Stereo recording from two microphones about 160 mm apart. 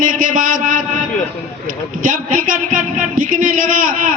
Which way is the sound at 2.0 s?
60° right (ahead or behind).